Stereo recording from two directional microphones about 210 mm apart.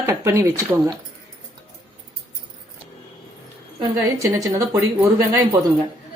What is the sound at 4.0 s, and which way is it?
Speech, 15° right (ahead or behind).